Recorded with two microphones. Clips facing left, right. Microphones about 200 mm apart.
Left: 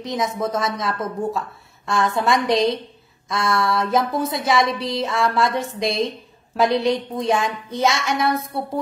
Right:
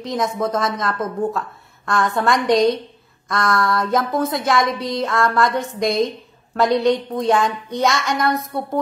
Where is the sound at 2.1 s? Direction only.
Centre (ahead or behind).